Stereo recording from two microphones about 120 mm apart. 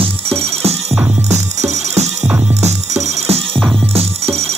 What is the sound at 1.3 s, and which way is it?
Music, 65° right (ahead or behind).